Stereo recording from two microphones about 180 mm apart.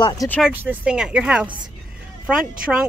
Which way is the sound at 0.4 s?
10° right (ahead or behind).